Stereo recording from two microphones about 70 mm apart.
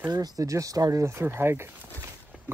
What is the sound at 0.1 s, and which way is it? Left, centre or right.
Speech, right.